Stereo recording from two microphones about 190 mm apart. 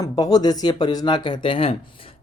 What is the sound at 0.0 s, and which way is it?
Speech, 20° left (ahead or behind).